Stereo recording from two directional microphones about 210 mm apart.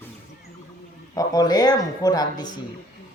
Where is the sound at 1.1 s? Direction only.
20° left (ahead or behind).